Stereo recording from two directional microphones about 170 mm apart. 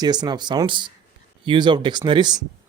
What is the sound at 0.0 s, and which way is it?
Speech, 25° right (ahead or behind).